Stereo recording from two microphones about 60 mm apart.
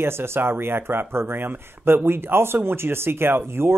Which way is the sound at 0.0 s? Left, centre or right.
Right.